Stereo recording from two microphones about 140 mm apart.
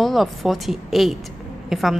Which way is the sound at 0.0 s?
Centre (ahead or behind).